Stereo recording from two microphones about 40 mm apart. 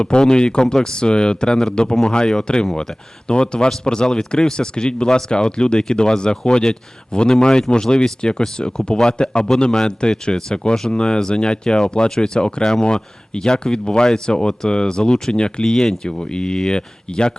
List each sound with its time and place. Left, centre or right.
0.0 s speech: left